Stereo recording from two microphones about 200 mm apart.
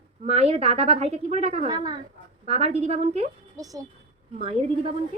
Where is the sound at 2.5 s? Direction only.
30° right (ahead or behind).